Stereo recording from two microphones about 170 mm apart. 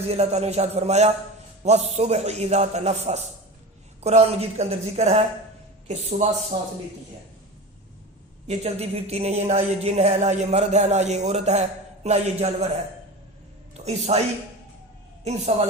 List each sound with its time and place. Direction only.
0.1 s speech: 40° right (ahead or behind)
8.4 s speech: 40° right (ahead or behind)
13.7 s a woman's voice: 40° right (ahead or behind)
15.2 s a woman's voice: 40° right (ahead or behind)